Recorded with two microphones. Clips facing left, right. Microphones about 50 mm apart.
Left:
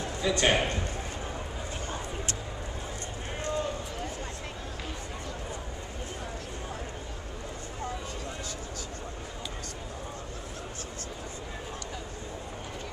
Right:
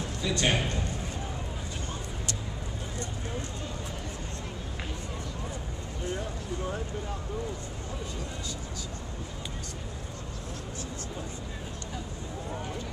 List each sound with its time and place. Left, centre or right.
0.2 s a man's voice: left